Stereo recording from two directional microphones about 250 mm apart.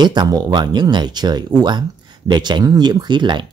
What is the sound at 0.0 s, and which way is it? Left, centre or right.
Speech, centre.